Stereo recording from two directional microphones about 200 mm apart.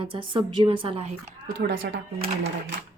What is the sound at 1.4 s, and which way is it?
Speech, 45° right (ahead or behind).